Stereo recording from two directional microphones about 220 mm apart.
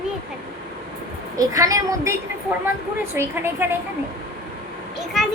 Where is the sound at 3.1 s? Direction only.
10° right (ahead or behind).